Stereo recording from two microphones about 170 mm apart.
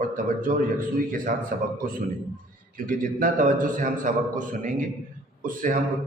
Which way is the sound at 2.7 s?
55° right (ahead or behind).